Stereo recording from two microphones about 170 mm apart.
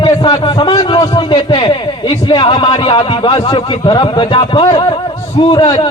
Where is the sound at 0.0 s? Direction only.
30° left (ahead or behind).